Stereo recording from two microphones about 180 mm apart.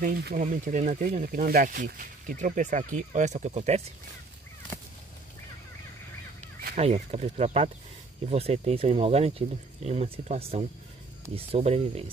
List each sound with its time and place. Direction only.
0.0 s speech: 55° right (ahead or behind); by 3.8 s 35° right (ahead or behind)
6.8 s speech: 35° right (ahead or behind)